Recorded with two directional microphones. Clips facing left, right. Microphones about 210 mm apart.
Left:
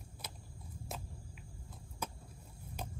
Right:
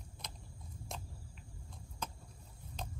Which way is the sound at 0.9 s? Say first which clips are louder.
Left 2 dB; 5° left (ahead or behind).